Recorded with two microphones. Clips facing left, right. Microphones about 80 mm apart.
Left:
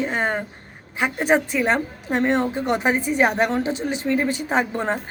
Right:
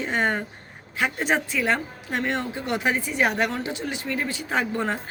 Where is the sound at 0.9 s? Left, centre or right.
Centre.